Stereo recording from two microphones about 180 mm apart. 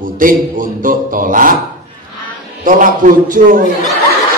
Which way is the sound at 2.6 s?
45° right (ahead or behind).